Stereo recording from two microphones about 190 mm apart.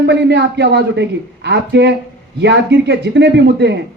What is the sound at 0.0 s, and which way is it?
Speech, 60° right (ahead or behind).